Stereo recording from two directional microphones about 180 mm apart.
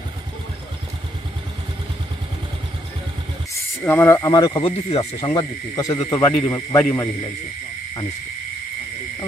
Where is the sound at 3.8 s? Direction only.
15° left (ahead or behind).